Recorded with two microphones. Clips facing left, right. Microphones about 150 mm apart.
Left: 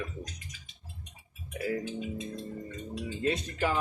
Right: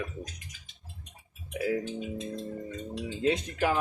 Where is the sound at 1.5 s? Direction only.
5° right (ahead or behind).